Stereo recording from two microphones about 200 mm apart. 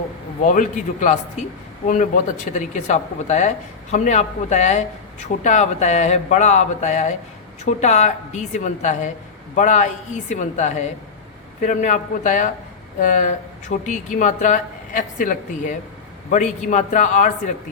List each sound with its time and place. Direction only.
0.4 s speech: 40° left (ahead or behind)